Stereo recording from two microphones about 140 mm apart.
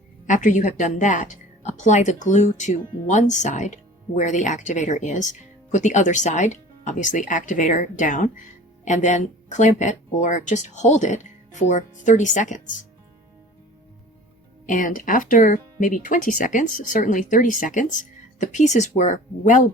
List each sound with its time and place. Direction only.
0.3 s a woman's voice: 65° left (ahead or behind)
14.7 s a woman's voice: 70° left (ahead or behind)